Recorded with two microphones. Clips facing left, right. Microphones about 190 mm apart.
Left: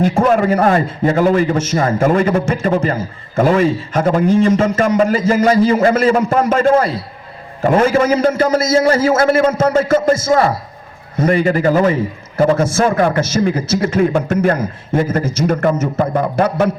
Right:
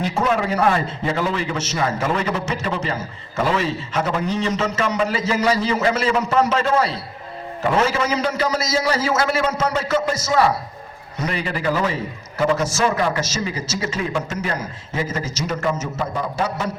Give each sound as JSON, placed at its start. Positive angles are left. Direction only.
{"t": 0.0, "sound": "a man's voice", "side_deg": 50}